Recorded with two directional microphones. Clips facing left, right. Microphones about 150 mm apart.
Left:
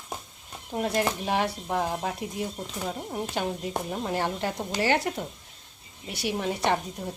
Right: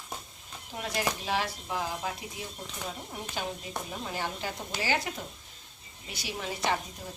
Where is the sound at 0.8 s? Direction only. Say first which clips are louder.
Left 6 dB; 55° left (ahead or behind).